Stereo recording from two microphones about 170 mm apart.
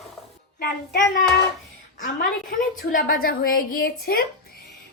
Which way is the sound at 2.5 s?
55° left (ahead or behind).